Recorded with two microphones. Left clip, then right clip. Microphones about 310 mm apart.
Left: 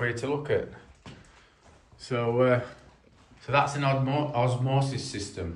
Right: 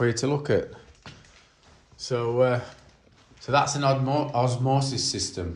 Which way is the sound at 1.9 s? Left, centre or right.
Centre.